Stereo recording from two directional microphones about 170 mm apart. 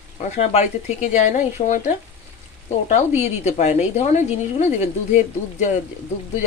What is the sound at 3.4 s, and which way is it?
A woman's voice, 40° left (ahead or behind).